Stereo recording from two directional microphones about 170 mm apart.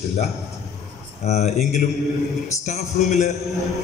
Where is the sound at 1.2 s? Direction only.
40° left (ahead or behind).